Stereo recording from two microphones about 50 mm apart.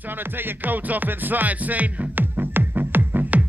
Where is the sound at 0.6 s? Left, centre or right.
Right.